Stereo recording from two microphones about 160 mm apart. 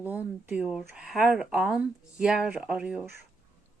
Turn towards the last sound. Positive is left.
turn(degrees=-5)  # may be behind; listen again after turning